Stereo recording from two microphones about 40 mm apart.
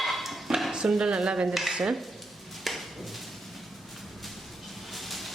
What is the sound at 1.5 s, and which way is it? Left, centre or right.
Speech, centre.